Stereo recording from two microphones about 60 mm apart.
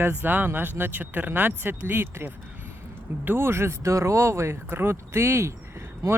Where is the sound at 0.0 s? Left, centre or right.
Right.